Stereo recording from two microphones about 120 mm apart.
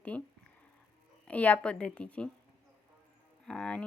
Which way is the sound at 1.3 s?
10° left (ahead or behind).